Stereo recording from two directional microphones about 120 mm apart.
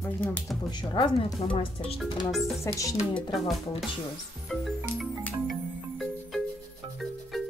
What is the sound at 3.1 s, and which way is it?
Speech, centre (ahead or behind).